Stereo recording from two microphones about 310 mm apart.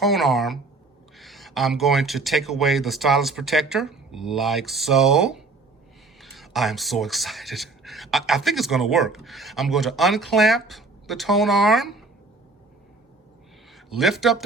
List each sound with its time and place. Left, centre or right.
0.0 s speech: centre
13.9 s speech: centre